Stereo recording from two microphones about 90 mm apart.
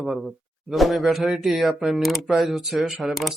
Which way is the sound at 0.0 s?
Centre (ahead or behind).